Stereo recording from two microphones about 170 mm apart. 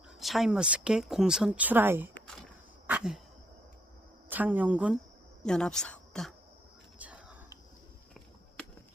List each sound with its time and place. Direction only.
0.2 s speech: centre (ahead or behind)
2.1 s a sound: 5° left (ahead or behind)
2.8 s a sound: 5° right (ahead or behind)
4.3 s a woman's voice: 10° right (ahead or behind)
5.4 s speech: 5° left (ahead or behind)
7.0 s whispering: 5° right (ahead or behind)